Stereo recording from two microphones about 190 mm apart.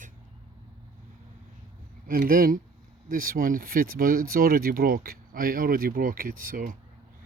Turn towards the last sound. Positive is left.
turn(degrees=-45)  # may be behind; listen again after turning